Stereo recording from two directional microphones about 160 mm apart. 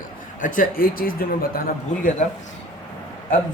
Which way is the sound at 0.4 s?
60° left (ahead or behind).